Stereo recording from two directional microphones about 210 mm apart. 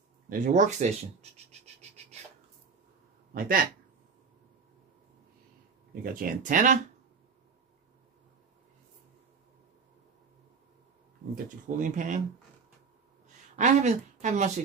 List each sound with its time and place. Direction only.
0.3 s speech: 35° right (ahead or behind)
3.3 s speech: 45° right (ahead or behind)
6.1 s speech: 40° right (ahead or behind)
11.6 s speech: 35° right (ahead or behind)
13.6 s speech: 35° right (ahead or behind)